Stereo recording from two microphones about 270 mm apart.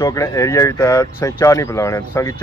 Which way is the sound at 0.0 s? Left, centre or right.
Centre.